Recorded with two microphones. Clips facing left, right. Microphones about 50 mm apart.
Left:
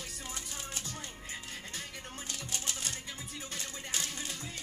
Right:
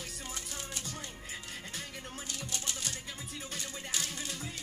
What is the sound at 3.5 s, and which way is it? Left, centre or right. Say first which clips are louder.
Music: even; centre.